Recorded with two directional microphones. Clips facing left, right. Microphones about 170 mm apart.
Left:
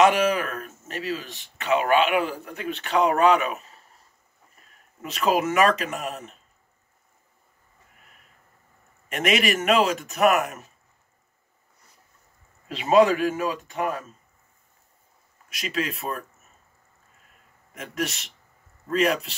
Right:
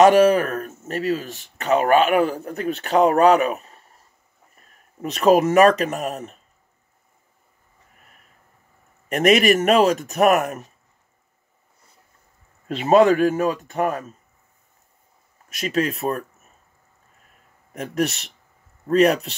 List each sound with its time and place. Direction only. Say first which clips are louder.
0.0 s speech: right 6 dB; 40° right (ahead or behind)
5.0 s speech: right 7 dB; 40° right (ahead or behind)
9.1 s speech: right 7 dB; 40° right (ahead or behind)
12.6 s speech: right 3 dB; 50° right (ahead or behind)
15.5 s speech: right 6 dB; 45° right (ahead or behind)
17.7 s speech: right 7 dB; 40° right (ahead or behind)